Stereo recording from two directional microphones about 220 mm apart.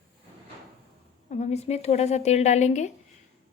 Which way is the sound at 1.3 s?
30° left (ahead or behind).